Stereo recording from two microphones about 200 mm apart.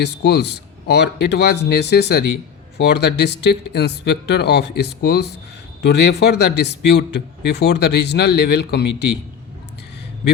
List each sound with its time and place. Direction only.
0.0 s a man's voice: 55° left (ahead or behind)